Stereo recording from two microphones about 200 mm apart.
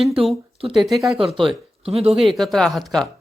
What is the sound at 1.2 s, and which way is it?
Speech, 25° right (ahead or behind).